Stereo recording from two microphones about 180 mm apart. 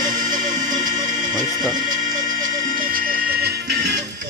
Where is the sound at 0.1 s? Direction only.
45° right (ahead or behind).